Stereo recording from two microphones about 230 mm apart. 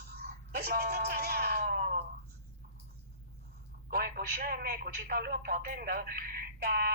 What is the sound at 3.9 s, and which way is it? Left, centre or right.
A man's voice, right.